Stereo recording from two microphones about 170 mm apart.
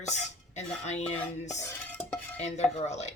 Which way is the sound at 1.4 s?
15° left (ahead or behind).